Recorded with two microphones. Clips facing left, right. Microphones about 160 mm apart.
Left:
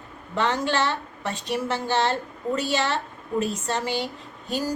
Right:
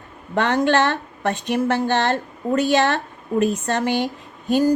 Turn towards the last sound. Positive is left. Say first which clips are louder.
# right 10 dB
turn(degrees=-55)  # may be behind; listen again after turning